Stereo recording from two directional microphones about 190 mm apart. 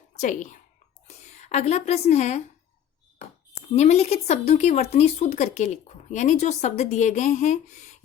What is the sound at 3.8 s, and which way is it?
A woman's voice, 35° left (ahead or behind).